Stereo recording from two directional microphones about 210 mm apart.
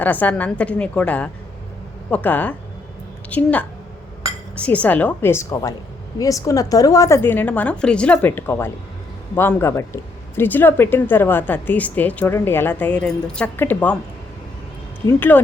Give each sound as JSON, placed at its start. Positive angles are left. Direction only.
{"t": 0.0, "sound": "speech", "side_deg": 10}
{"t": 15.0, "sound": "speech", "side_deg": 10}